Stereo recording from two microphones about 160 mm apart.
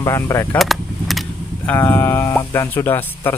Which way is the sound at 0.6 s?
Centre (ahead or behind).